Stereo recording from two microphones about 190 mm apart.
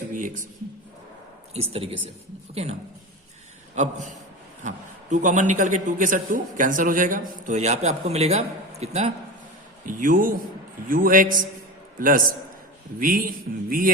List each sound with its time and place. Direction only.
1.7 s a man's voice: 30° right (ahead or behind)
3.8 s a man's voice: 35° right (ahead or behind)
5.1 s a man's voice: 40° right (ahead or behind)
9.8 s speech: 45° right (ahead or behind)